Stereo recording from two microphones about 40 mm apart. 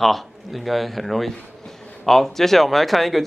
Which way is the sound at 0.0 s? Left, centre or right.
Centre.